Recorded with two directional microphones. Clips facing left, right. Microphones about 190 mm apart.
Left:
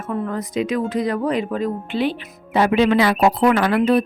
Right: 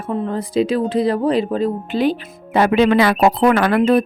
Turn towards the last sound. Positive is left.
turn(degrees=-50)  # may be behind; listen again after turning